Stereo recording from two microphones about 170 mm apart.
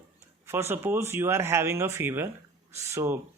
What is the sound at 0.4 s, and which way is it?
Speech, 15° right (ahead or behind).